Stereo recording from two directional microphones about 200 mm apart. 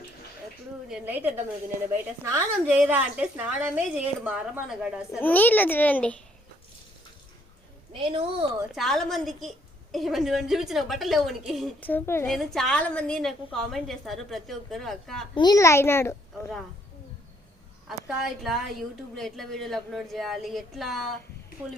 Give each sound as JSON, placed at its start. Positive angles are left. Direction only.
{"t": 0.9, "sound": "a woman's voice", "side_deg": -5}
{"t": 5.2, "sound": "a child's voice", "side_deg": 10}
{"t": 7.9, "sound": "a woman's voice", "side_deg": -25}
{"t": 8.7, "sound": "a woman's voice", "side_deg": 0}
{"t": 15.4, "sound": "a child's voice", "side_deg": 20}
{"t": 17.8, "sound": "a woman's voice", "side_deg": 0}